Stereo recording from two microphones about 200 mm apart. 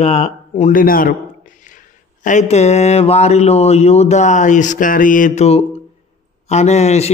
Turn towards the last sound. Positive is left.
turn(degrees=35)  # may be behind; listen again after turning